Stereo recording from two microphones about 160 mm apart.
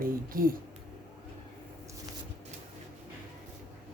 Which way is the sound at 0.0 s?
65° right (ahead or behind).